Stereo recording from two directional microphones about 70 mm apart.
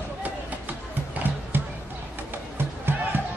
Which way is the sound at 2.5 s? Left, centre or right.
Right.